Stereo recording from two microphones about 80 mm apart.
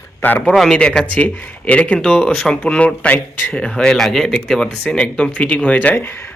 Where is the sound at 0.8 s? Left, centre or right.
Centre.